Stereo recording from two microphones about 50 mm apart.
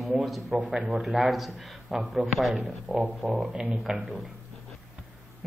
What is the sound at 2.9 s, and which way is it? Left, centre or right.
Speech, centre.